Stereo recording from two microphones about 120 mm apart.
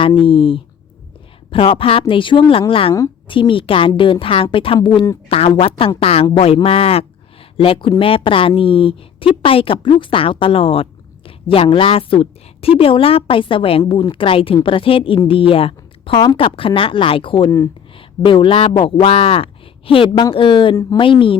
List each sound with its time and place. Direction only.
0.0 s a woman's voice: 45° left (ahead or behind)